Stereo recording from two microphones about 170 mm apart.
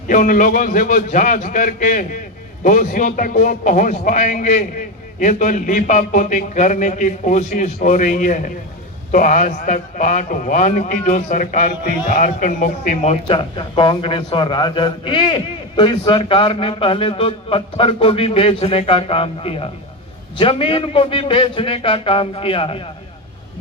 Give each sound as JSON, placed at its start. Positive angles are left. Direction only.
{"t": 0.1, "sound": "a man's voice", "side_deg": 50}